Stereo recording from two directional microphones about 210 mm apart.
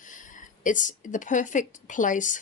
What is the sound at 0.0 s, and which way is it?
Speech, 40° left (ahead or behind).